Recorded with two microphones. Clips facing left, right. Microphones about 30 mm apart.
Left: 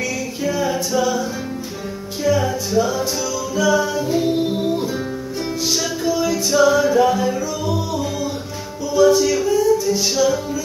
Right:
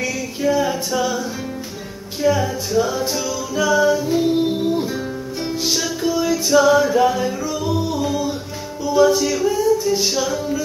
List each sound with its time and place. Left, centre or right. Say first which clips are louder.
0.0 s a capella: right 1 dB; centre
2.2 s music: even; right
2.8 s music: even; centre
3.9 s music: right 1 dB; centre